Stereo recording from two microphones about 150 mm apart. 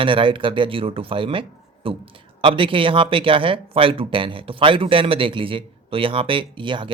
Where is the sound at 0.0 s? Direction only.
35° right (ahead or behind).